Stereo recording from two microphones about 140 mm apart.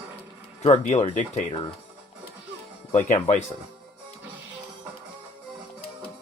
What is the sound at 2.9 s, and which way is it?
Speech, 50° left (ahead or behind).